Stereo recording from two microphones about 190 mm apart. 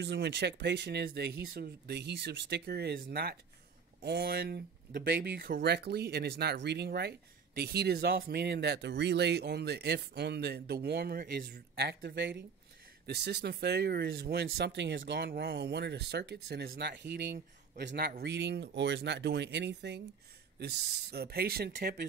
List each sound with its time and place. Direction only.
0.0 s speech: 65° right (ahead or behind)